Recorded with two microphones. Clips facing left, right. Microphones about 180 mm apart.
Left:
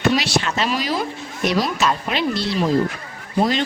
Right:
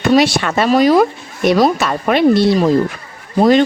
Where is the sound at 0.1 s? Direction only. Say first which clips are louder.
Right 11 dB; 55° right (ahead or behind).